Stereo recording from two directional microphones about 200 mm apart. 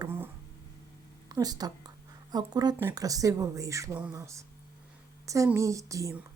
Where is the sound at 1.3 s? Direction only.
20° right (ahead or behind).